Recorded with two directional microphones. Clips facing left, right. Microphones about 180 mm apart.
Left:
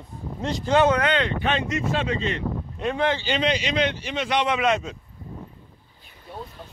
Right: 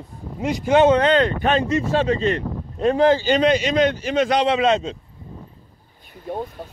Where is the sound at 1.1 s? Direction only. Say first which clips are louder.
Right 6 dB; 45° right (ahead or behind).